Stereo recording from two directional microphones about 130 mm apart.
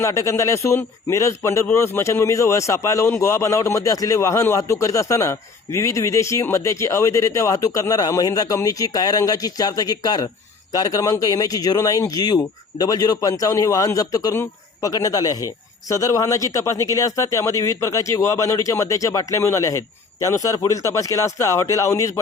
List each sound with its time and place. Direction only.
0.0 s a man's voice: 20° left (ahead or behind)